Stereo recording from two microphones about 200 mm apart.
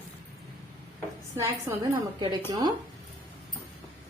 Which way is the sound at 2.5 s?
20° right (ahead or behind).